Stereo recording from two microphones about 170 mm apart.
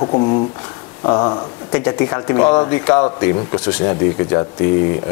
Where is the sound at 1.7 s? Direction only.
15° left (ahead or behind).